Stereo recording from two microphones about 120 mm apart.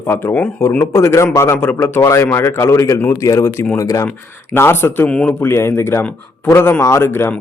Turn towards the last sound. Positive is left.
turn(degrees=20)  # may be behind; listen again after turning